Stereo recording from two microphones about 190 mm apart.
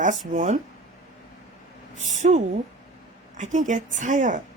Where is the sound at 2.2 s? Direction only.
35° right (ahead or behind).